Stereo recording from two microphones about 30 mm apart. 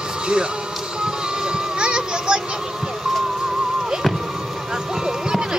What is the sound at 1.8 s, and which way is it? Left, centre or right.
Music, right.